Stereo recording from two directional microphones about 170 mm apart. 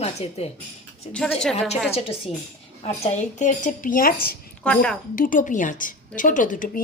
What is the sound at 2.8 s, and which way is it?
A woman's voice, 45° left (ahead or behind).